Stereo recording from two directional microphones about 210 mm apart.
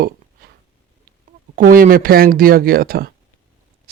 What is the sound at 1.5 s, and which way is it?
Speech, 40° right (ahead or behind).